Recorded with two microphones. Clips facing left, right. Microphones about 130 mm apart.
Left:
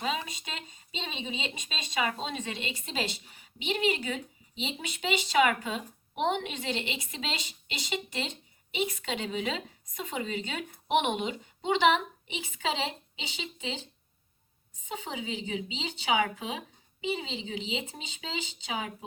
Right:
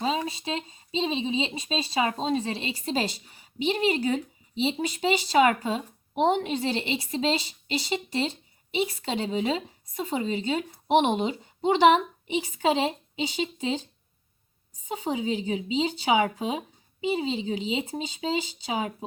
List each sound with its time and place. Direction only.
0.0 s speech: 30° right (ahead or behind)
14.8 s speech: 40° right (ahead or behind)